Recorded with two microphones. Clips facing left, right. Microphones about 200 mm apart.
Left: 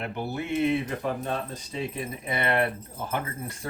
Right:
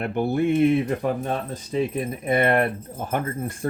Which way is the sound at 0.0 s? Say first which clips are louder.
Right 10 dB; 55° right (ahead or behind).